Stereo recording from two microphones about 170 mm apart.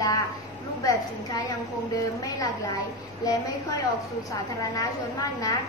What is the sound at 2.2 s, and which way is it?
Speech, 25° left (ahead or behind).